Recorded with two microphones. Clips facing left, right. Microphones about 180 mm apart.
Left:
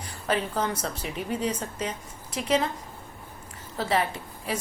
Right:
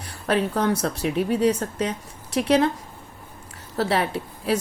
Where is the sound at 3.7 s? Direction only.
70° right (ahead or behind).